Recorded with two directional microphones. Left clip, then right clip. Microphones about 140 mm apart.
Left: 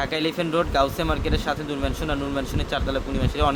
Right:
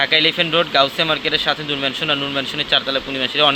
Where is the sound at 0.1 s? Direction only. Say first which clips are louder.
Right 9 dB; 10° right (ahead or behind).